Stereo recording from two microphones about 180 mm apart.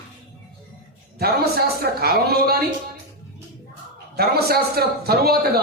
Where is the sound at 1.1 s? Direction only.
60° right (ahead or behind).